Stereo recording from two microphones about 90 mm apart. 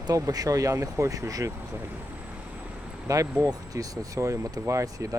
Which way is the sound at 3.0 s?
35° right (ahead or behind).